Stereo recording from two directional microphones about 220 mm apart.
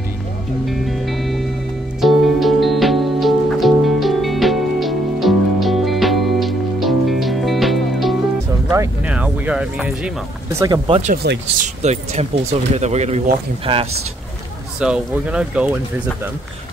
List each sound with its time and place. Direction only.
0.7 s music: centre (ahead or behind)
10.6 s speech: 15° right (ahead or behind)
11.3 s speech: 50° right (ahead or behind)
11.6 s speech: 30° right (ahead or behind)
14.8 s speech: 5° right (ahead or behind)